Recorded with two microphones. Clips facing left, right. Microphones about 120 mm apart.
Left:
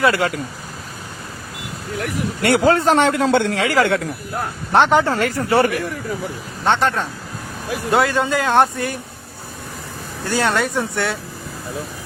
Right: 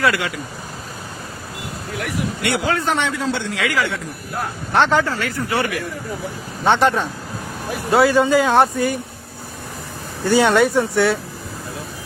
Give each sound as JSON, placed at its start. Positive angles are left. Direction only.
{"t": 2.4, "sound": "speech", "side_deg": 40}
{"t": 3.0, "sound": "a man's voice", "side_deg": 55}
{"t": 3.5, "sound": "speech", "side_deg": 35}
{"t": 4.7, "sound": "speech", "side_deg": 20}
{"t": 5.0, "sound": "speech", "side_deg": 40}
{"t": 6.7, "sound": "speech", "side_deg": -15}
{"t": 7.9, "sound": "speech", "side_deg": 0}
{"t": 10.2, "sound": "speech", "side_deg": -5}